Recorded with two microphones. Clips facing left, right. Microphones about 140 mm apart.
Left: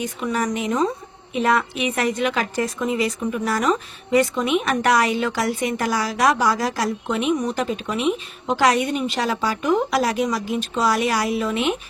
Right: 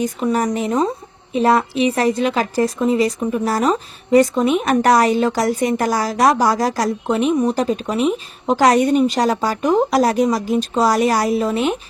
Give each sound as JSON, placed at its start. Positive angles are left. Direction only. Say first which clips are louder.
{"t": 0.0, "sound": "a woman's voice", "louder": "right 5 dB", "side_deg": -40}